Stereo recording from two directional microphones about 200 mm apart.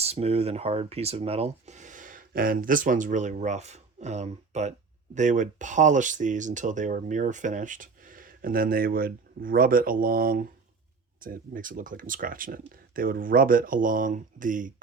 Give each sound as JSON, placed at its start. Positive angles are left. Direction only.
{"t": 0.0, "sound": "speech", "side_deg": -30}